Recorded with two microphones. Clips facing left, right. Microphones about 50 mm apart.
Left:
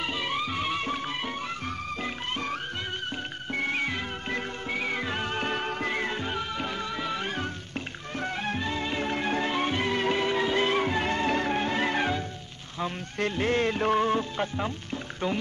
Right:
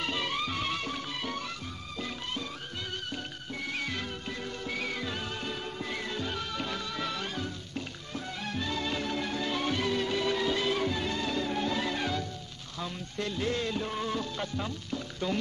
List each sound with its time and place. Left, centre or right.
0.0 s music: centre
0.7 s music: left
3.5 s music: left
8.5 s music: left
12.8 s speech: left